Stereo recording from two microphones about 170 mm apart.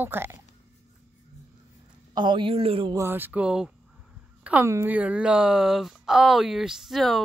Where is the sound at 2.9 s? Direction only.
10° right (ahead or behind).